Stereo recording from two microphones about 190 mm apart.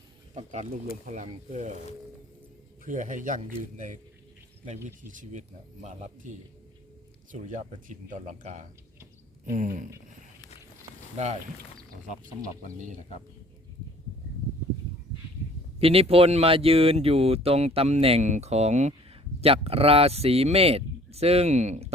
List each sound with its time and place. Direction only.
0.3 s speech: 40° right (ahead or behind)
2.8 s speech: 40° right (ahead or behind)
11.2 s speech: 35° right (ahead or behind)
15.8 s speech: 30° right (ahead or behind)